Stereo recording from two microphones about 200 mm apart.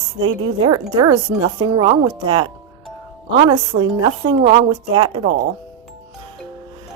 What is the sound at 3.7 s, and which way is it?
Speech, 45° right (ahead or behind).